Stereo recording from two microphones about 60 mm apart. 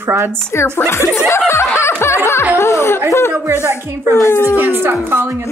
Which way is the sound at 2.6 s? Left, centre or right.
Left.